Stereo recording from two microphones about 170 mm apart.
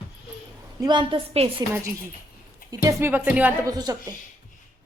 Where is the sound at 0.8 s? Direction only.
25° right (ahead or behind).